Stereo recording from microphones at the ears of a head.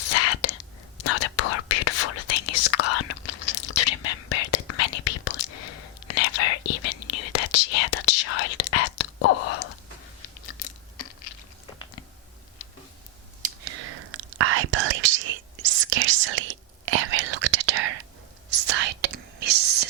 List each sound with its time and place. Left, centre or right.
0.0 s whispering: left
10.2 s crunch: left
13.4 s whispering: right